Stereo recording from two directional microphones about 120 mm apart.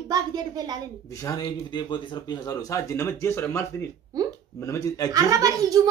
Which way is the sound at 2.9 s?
20° left (ahead or behind).